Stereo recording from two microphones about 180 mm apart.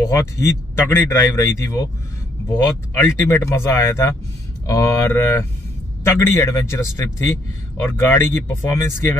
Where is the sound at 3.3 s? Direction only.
15° left (ahead or behind).